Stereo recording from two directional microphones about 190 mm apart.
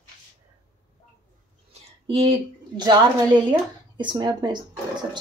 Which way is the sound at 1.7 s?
25° right (ahead or behind).